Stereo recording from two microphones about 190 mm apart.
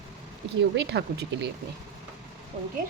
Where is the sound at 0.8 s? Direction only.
65° right (ahead or behind).